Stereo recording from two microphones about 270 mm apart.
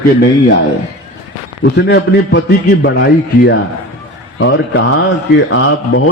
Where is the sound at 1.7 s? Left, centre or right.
Left.